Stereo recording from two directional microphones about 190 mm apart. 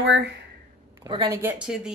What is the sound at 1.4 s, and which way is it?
Speech, 5° right (ahead or behind).